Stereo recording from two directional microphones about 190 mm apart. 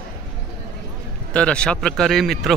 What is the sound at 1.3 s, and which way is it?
Speech, 5° left (ahead or behind).